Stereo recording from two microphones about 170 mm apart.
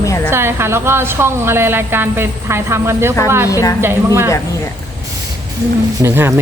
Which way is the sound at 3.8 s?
15° right (ahead or behind).